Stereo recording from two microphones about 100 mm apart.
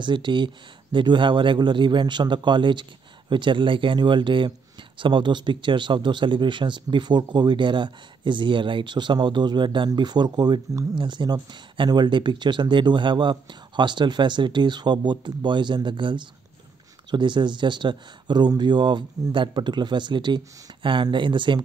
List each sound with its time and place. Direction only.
0.0 s speech: 50° right (ahead or behind)
11.0 s speech: 50° right (ahead or behind)